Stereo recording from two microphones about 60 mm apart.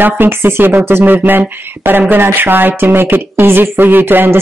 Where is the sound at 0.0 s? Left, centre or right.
Right.